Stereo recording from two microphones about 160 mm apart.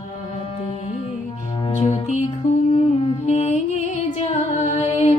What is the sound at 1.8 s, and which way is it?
Music, 45° left (ahead or behind).